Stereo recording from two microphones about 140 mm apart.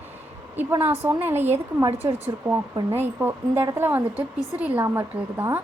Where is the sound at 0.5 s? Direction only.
15° right (ahead or behind).